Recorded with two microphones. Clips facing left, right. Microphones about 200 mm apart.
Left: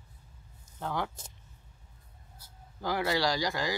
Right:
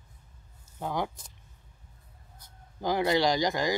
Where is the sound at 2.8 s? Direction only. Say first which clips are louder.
Right 4 dB; 20° right (ahead or behind).